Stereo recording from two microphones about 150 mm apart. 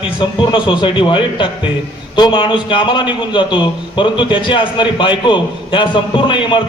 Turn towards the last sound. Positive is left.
turn(degrees=30)  # may be behind; listen again after turning